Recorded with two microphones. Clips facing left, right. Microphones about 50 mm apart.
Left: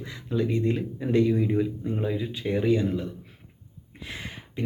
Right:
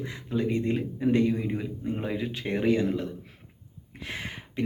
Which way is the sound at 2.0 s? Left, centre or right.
Right.